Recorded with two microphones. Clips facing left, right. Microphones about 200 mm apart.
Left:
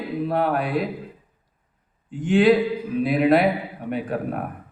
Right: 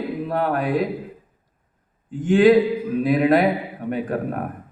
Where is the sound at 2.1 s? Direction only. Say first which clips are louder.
Right 2 dB; 45° right (ahead or behind).